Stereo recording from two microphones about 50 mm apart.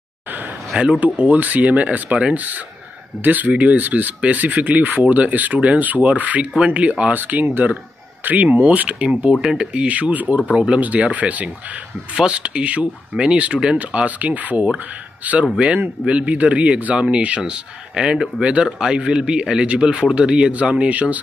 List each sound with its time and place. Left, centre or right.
0.7 s a man's voice: right